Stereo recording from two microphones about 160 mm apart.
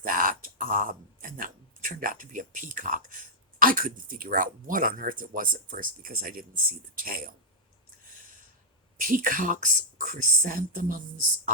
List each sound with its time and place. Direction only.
0.0 s speech: 60° right (ahead or behind)
9.0 s a woman's voice: 60° right (ahead or behind)